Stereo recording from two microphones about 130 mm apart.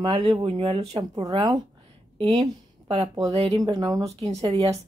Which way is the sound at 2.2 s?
35° right (ahead or behind).